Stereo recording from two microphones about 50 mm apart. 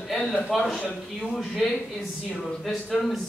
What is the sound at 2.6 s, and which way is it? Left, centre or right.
Speech, centre.